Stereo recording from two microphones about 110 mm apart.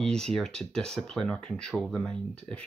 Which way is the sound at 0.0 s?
5° left (ahead or behind).